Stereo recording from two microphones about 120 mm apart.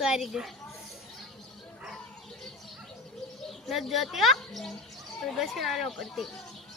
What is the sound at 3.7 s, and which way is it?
Speech, centre (ahead or behind).